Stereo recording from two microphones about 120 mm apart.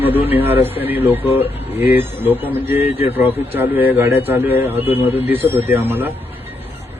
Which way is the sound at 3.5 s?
15° right (ahead or behind).